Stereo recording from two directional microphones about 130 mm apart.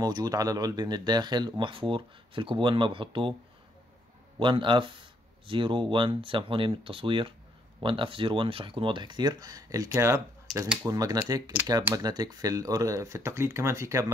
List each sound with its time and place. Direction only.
0.0 s speech: 30° right (ahead or behind)
4.4 s speech: 40° right (ahead or behind); by 14.1 s 25° right (ahead or behind)